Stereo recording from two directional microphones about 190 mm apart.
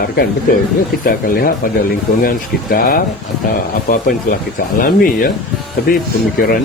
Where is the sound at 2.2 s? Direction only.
50° left (ahead or behind).